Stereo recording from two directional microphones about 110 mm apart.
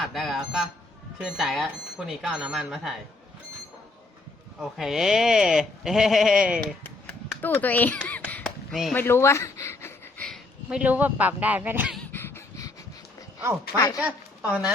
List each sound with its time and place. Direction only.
0.0 s speech: centre (ahead or behind)
4.6 s speech: 5° right (ahead or behind)
7.4 s speech: 15° left (ahead or behind)
8.4 s a sound: centre (ahead or behind)
9.0 s speech: 20° left (ahead or behind)
10.2 s a sound: 5° left (ahead or behind)
10.7 s speech: 10° right (ahead or behind)
12.1 s a sound: 20° left (ahead or behind)
13.7 s speech: 35° left (ahead or behind)
14.0 s a woman's voice: 5° right (ahead or behind)